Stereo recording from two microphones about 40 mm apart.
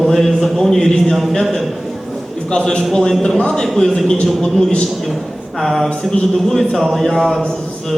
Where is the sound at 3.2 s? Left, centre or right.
Left.